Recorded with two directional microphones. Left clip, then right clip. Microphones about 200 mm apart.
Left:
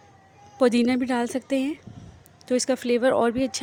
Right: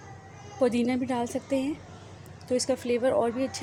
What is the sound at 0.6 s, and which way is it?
Speech, 45° left (ahead or behind).